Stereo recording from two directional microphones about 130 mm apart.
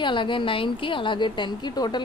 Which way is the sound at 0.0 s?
40° left (ahead or behind).